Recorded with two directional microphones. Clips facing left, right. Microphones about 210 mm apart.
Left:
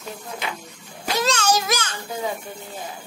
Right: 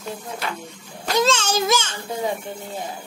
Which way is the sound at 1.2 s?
25° right (ahead or behind).